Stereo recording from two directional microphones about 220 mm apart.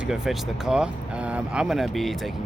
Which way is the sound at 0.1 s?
Centre (ahead or behind).